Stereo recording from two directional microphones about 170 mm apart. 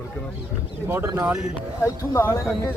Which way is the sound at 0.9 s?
15° right (ahead or behind).